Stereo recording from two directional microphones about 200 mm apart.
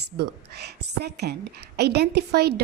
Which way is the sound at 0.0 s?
55° right (ahead or behind).